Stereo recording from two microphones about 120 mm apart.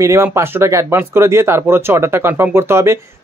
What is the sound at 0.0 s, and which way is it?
Speech, 25° right (ahead or behind).